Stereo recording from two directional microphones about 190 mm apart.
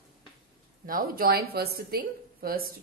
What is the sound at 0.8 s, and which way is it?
A woman's voice, 50° right (ahead or behind).